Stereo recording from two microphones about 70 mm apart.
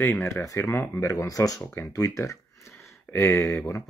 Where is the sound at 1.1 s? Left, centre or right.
Left.